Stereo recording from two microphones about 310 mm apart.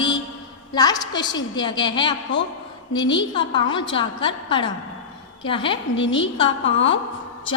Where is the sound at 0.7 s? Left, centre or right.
Centre.